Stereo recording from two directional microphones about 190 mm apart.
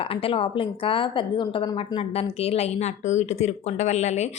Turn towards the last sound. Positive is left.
turn(degrees=35)  # may be behind; listen again after turning